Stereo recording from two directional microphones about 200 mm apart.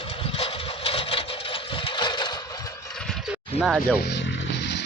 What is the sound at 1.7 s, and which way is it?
Engine, 25° left (ahead or behind).